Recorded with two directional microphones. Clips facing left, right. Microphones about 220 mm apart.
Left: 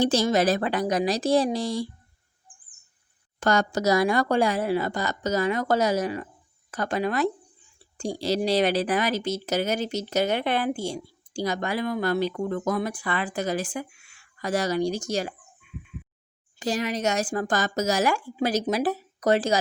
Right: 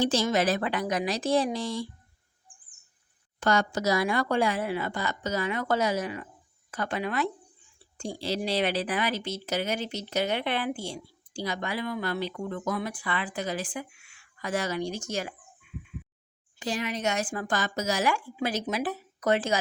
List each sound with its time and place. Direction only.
0.0 s speech: 40° left (ahead or behind)
3.4 s speech: 40° left (ahead or behind)
16.6 s speech: 40° left (ahead or behind)